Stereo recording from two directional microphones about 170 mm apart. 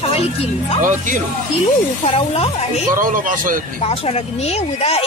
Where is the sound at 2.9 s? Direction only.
55° right (ahead or behind).